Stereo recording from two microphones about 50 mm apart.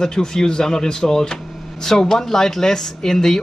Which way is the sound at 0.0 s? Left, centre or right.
Centre.